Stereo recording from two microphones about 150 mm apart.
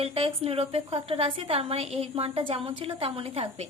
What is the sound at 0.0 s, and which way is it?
A woman's voice, 40° right (ahead or behind).